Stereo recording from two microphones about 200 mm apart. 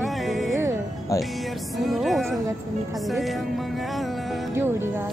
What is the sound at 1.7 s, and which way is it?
Music, centre (ahead or behind).